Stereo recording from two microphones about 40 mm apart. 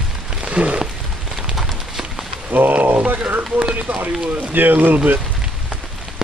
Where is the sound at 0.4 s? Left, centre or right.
Right.